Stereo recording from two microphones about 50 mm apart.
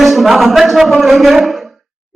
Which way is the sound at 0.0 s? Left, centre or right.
Centre.